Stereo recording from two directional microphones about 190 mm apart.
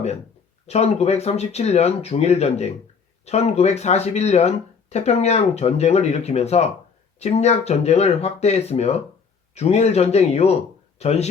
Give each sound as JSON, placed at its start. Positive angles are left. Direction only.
{"t": 0.7, "sound": "speech", "side_deg": 35}